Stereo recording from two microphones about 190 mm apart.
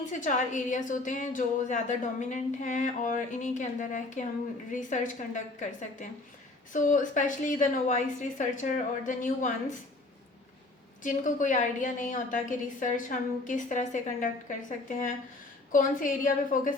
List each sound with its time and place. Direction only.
0.1 s a woman's voice: 40° left (ahead or behind)
11.0 s a woman's voice: 45° left (ahead or behind)
15.7 s a woman's voice: 45° left (ahead or behind)